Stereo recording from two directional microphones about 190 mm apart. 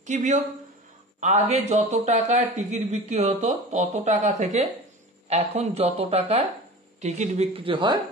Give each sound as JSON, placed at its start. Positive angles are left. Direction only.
{"t": 0.0, "sound": "a woman's voice", "side_deg": -40}